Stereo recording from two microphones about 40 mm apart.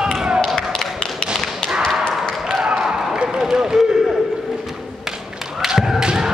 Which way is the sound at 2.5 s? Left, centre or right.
Centre.